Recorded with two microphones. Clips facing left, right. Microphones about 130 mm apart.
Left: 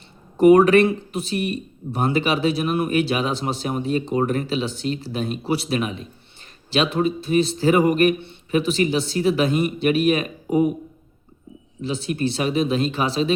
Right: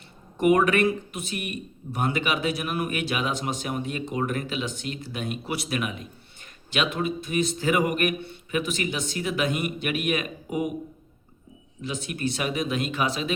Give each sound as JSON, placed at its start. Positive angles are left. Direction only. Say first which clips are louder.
{"t": 0.3, "sound": "a man's voice", "louder": "left 8 dB", "side_deg": 35}
{"t": 11.8, "sound": "a man's voice", "louder": "left 6 dB", "side_deg": 30}